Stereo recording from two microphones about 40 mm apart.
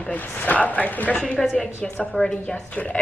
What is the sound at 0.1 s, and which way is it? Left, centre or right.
Speech, left.